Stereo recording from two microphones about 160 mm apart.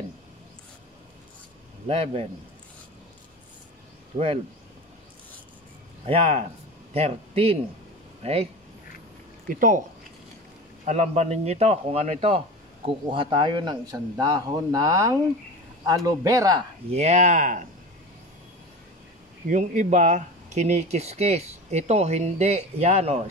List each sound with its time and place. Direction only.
1.9 s a man's voice: 40° right (ahead or behind)
4.1 s a man's voice: 35° right (ahead or behind)
6.0 s a man's voice: 35° right (ahead or behind)
9.5 s speech: 55° right (ahead or behind)
10.9 s a man's voice: 45° right (ahead or behind); by 16.6 s 20° right (ahead or behind)
16.9 s speech: 45° right (ahead or behind)
19.4 s speech: 50° right (ahead or behind)